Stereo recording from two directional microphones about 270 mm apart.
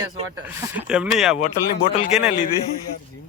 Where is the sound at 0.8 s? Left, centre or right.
Centre.